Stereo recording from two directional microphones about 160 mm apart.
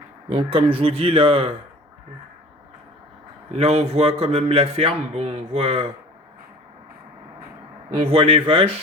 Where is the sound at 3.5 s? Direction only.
40° right (ahead or behind).